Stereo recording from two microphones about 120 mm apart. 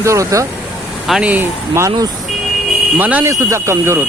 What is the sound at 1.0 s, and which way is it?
Speech, 5° right (ahead or behind).